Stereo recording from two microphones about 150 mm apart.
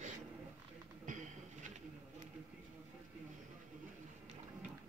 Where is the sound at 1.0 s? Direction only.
55° right (ahead or behind).